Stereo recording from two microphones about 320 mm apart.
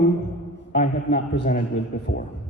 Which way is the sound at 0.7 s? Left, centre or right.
Left.